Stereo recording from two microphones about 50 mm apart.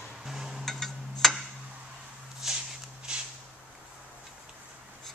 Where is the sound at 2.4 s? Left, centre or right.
Centre.